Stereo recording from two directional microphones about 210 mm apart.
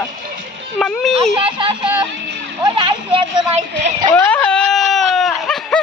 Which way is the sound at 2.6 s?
20° right (ahead or behind).